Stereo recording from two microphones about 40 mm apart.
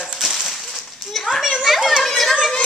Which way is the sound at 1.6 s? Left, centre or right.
Centre.